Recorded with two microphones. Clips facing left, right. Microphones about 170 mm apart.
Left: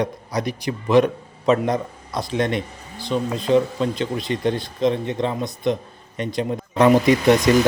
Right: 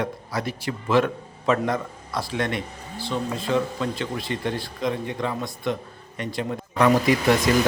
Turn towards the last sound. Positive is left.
turn(degrees=20)  # may be behind; listen again after turning